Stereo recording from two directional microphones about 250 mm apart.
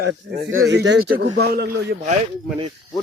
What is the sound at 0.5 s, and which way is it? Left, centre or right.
Speech, right.